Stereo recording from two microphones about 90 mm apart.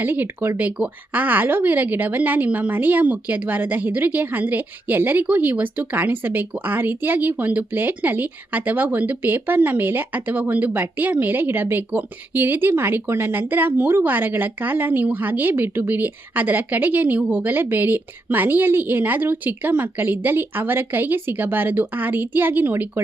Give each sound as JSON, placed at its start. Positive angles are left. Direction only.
{"t": 0.0, "sound": "speech", "side_deg": -20}